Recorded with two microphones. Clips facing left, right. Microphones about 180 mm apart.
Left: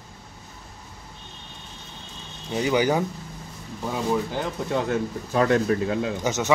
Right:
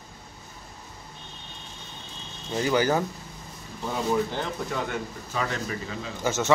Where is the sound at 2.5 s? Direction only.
15° left (ahead or behind).